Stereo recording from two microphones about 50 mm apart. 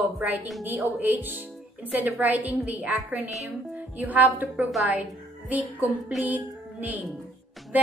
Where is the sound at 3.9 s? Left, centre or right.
Right.